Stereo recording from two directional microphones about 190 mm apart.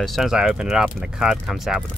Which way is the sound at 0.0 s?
Centre (ahead or behind).